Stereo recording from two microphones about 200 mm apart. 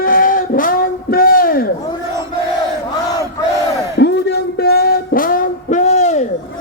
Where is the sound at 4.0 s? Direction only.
55° left (ahead or behind); by 6.2 s 35° left (ahead or behind).